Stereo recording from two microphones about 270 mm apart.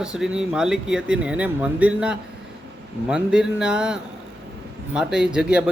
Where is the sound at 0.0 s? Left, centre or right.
Centre.